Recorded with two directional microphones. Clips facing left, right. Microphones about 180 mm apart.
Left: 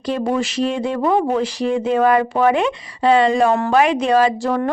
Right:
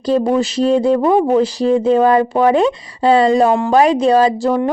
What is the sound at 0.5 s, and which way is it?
Speech, 35° right (ahead or behind).